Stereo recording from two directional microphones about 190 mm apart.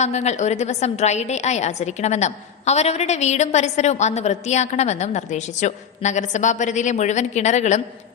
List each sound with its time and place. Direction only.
0.0 s a woman's voice: 35° left (ahead or behind)